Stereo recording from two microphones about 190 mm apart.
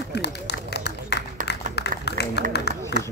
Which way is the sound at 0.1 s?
65° left (ahead or behind).